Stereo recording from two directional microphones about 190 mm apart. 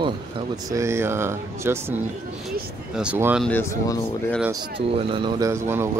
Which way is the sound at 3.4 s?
10° left (ahead or behind).